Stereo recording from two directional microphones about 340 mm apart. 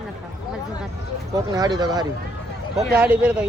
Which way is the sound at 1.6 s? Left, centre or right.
Centre.